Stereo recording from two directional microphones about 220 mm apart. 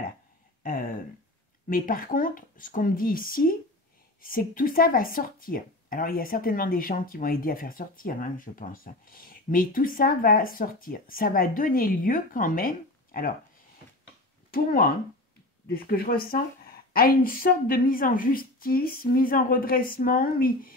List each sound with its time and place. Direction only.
0.7 s a sound: 40° left (ahead or behind)
1.7 s speech: 40° left (ahead or behind)
14.5 s speech: 40° left (ahead or behind)